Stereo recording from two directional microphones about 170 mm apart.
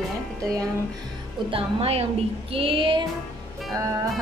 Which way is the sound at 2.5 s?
30° right (ahead or behind).